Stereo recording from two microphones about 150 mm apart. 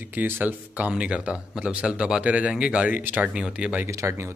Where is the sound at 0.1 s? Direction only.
10° right (ahead or behind).